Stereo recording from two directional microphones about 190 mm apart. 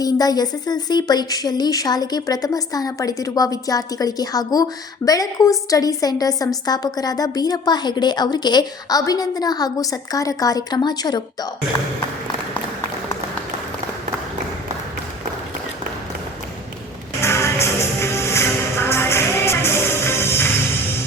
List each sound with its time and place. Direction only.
0.0 s a woman's voice: 20° left (ahead or behind)
17.2 s music: 15° left (ahead or behind)